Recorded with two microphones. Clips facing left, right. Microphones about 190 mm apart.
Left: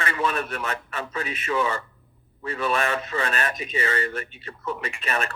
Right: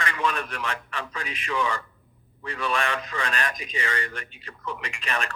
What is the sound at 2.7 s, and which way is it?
Speech, 35° left (ahead or behind).